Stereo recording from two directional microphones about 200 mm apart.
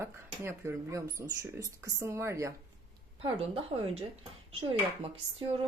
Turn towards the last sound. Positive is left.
turn(degrees=-30)  # may be behind; listen again after turning